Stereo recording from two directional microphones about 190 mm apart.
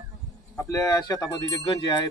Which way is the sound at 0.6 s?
15° left (ahead or behind).